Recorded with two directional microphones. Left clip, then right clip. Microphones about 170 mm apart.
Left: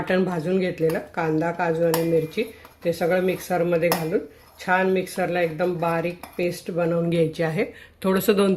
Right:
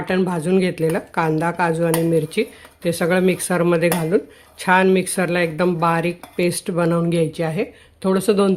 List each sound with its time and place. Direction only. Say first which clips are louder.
0.1 s speech: right 4 dB; 20° right (ahead or behind); by 7.0 s 40° right (ahead or behind)
7.1 s speech: right 2 dB; 20° right (ahead or behind)